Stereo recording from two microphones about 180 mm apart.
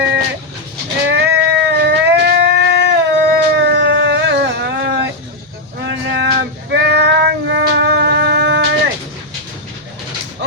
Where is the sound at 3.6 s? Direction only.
70° right (ahead or behind).